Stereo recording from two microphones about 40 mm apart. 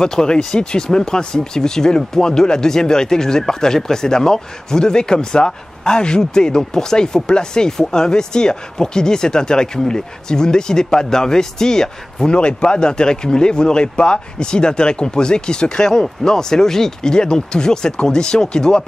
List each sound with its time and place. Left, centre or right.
0.0 s speech: centre
12.3 s speech: left